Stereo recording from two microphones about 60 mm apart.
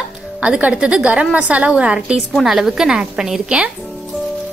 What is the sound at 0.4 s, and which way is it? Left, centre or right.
A woman's voice, right.